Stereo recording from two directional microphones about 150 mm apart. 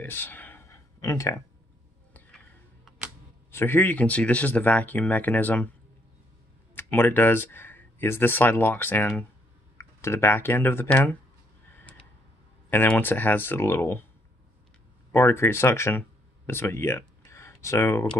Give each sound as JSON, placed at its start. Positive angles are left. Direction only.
{"t": 0.0, "sound": "a sound", "side_deg": 15}
{"t": 3.5, "sound": "speech", "side_deg": 15}
{"t": 6.7, "sound": "speech", "side_deg": 15}
{"t": 12.6, "sound": "speech", "side_deg": 10}
{"t": 15.1, "sound": "speech", "side_deg": 15}